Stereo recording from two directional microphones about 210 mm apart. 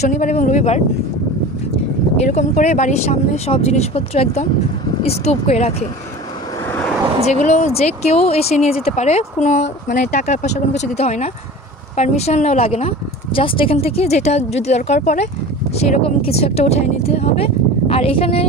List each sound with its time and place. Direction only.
0.0 s speech: 35° left (ahead or behind)
2.2 s speech: 35° left (ahead or behind)
6.7 s vehicle: 5° left (ahead or behind)
7.3 s speech: 35° left (ahead or behind)